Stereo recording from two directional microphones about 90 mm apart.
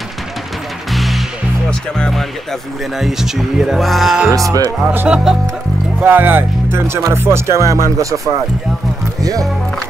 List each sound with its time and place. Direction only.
0.9 s music: centre (ahead or behind)
1.7 s speech: 10° left (ahead or behind)
3.0 s speech: 5° right (ahead or behind)
4.8 s speech: 15° right (ahead or behind)
5.9 s speech: 20° right (ahead or behind)
9.2 s speech: 40° right (ahead or behind)